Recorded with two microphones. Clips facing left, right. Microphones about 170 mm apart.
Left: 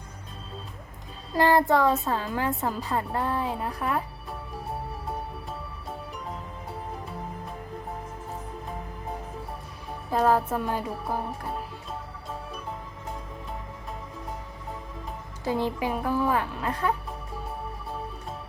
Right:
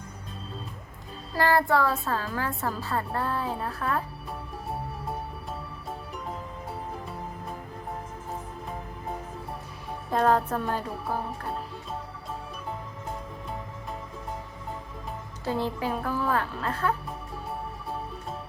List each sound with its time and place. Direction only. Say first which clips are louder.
1.4 s a woman's voice: left 2 dB; 20° left (ahead or behind)
10.1 s music: even; 5° left (ahead or behind)
15.4 s a woman's voice: left 2 dB; 15° left (ahead or behind)